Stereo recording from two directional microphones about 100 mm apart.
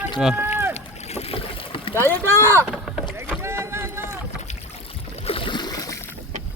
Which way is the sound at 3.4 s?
25° right (ahead or behind).